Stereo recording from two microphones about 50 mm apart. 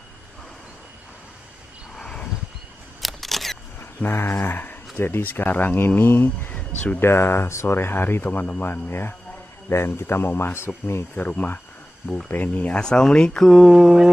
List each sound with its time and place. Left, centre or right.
2.0 s a sound: centre
3.0 s single-lens reflex camera: centre
4.0 s speech: left
6.5 s a sound: left
7.0 s speech: left
11.1 s speech: left
12.7 s speech: centre
13.5 s mantra: centre